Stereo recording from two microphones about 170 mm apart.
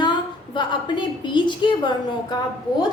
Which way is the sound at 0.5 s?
30° left (ahead or behind).